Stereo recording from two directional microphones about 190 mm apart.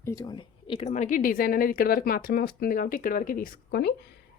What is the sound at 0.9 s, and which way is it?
A woman's voice, 40° left (ahead or behind).